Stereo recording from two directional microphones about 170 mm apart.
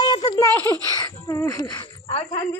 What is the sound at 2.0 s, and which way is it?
Speech, 35° left (ahead or behind).